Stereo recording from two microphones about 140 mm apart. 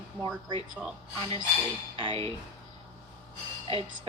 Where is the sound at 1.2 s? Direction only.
35° right (ahead or behind).